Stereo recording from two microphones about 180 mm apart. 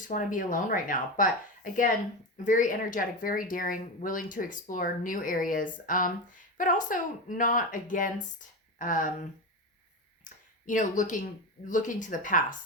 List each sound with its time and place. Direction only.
0.1 s speech: 45° left (ahead or behind)
2.4 s speech: 45° left (ahead or behind)
10.2 s a sound: 45° left (ahead or behind)
11.7 s speech: 45° left (ahead or behind)